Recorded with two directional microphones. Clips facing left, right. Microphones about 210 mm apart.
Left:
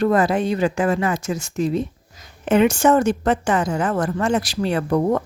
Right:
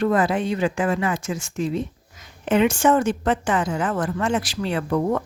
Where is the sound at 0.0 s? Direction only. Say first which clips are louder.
Left 2 dB; 40° left (ahead or behind).